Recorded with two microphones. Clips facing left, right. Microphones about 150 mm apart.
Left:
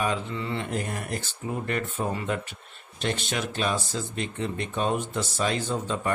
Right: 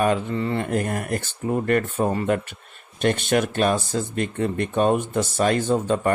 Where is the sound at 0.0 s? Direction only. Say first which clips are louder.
Right 7 dB; 50° right (ahead or behind).